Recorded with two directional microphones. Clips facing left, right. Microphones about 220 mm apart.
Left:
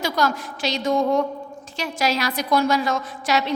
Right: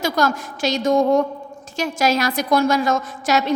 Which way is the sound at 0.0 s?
45° right (ahead or behind).